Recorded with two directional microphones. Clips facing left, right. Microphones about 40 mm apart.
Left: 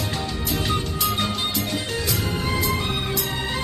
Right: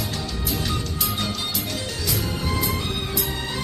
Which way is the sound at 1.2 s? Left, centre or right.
Left.